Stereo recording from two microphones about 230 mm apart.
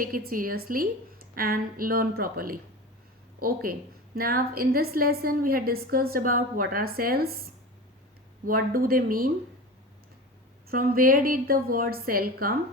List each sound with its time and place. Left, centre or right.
0.0 s a woman's voice: right
8.4 s a woman's voice: right
10.7 s a woman's voice: right